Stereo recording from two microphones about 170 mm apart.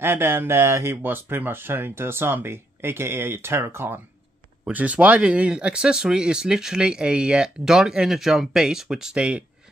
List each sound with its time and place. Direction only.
0.0 s speech: 15° right (ahead or behind)